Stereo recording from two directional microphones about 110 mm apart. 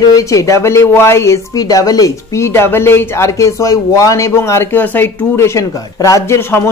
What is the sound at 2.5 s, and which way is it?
Speech, 20° left (ahead or behind).